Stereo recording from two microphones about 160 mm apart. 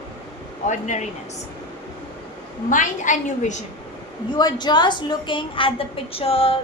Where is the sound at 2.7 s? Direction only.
50° left (ahead or behind).